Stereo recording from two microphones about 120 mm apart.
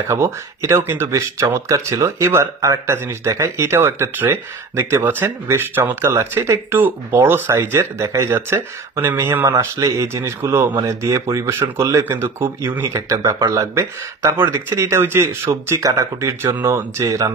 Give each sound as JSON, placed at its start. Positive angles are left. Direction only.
{"t": 0.1, "sound": "speech", "side_deg": -25}